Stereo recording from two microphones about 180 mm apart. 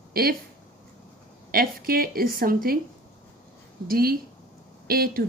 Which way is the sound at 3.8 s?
55° right (ahead or behind).